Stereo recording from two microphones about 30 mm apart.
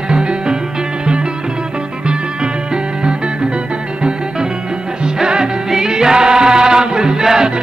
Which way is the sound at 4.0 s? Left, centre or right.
Right.